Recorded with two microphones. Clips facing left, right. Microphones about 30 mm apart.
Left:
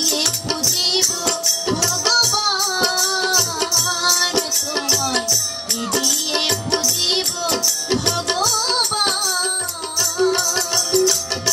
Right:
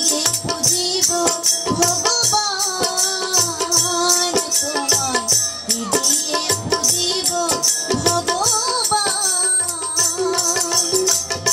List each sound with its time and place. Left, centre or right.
0.2 s music: left
2.0 s music: left
4.8 s music: centre
6.4 s music: centre
10.7 s music: centre